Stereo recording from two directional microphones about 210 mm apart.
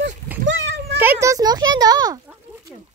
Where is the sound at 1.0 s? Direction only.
10° right (ahead or behind).